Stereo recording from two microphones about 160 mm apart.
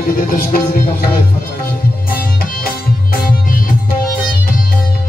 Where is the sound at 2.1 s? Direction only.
65° left (ahead or behind).